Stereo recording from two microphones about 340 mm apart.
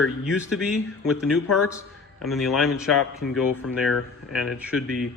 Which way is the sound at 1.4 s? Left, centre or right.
Left.